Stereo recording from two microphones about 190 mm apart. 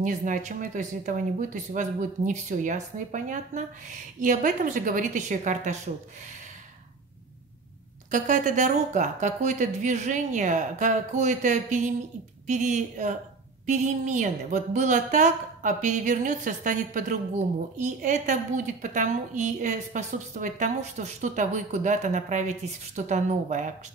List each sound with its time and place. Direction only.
0.0 s a woman's voice: 40° right (ahead or behind)
8.1 s a woman's voice: 40° right (ahead or behind)